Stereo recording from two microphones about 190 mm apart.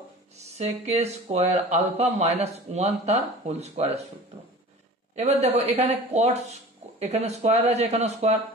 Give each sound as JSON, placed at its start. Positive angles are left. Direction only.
{"t": 0.6, "sound": "speech", "side_deg": -35}
{"t": 5.1, "sound": "speech", "side_deg": -35}